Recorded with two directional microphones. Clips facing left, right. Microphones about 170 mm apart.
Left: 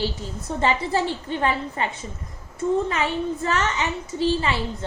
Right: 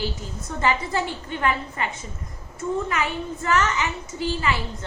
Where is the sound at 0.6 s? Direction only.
30° left (ahead or behind).